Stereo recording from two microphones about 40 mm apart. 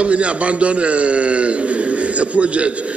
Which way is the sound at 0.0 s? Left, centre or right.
Right.